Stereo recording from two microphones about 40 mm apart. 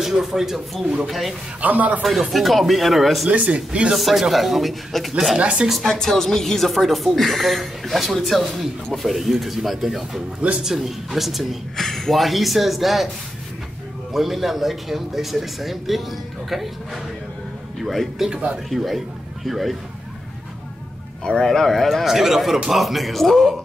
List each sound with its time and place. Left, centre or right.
0.0 s speech: centre
1.6 s a man's voice: right
2.3 s speech: centre
3.3 s speech: right
3.9 s speech: centre
5.4 s speech: right
5.9 s speech: centre
14.1 s speech: centre
21.3 s speech: centre
22.0 s speech: centre